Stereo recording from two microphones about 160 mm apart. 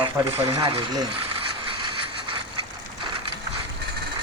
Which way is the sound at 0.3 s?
40° right (ahead or behind).